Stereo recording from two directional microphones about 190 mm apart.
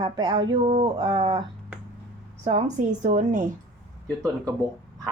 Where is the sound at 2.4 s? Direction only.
40° right (ahead or behind).